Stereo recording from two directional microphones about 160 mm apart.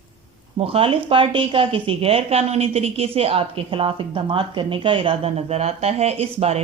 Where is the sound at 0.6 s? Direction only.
35° right (ahead or behind).